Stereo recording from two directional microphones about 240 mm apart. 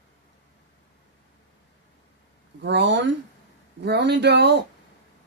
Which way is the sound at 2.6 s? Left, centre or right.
Right.